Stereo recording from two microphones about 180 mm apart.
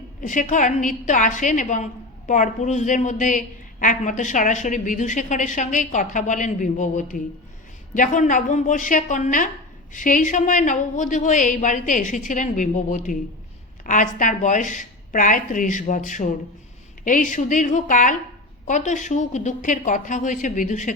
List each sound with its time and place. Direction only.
0.2 s a woman's voice: 45° left (ahead or behind)